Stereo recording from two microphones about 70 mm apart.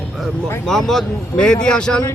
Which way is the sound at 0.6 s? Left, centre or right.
Centre.